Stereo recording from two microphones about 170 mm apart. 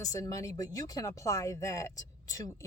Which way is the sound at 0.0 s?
20° left (ahead or behind).